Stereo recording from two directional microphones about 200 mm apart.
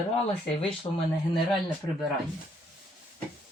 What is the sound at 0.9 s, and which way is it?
Speech, 25° left (ahead or behind).